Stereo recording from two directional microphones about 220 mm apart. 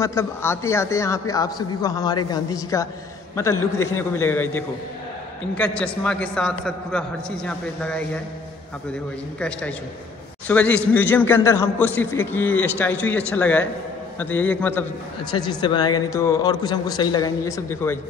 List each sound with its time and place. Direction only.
0.0 s a man's voice: 15° left (ahead or behind)
9.4 s a man's voice: 5° left (ahead or behind)
15.3 s a man's voice: 20° left (ahead or behind)